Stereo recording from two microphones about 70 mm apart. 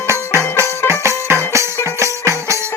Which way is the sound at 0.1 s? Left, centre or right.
Right.